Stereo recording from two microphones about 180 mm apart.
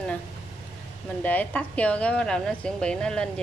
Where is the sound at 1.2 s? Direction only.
10° left (ahead or behind).